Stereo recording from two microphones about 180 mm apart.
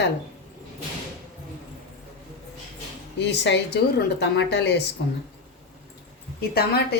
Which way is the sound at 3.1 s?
70° left (ahead or behind).